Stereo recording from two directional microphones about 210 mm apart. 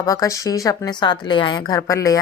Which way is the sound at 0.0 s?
15° left (ahead or behind).